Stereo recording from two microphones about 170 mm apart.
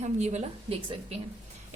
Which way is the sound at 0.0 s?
40° right (ahead or behind).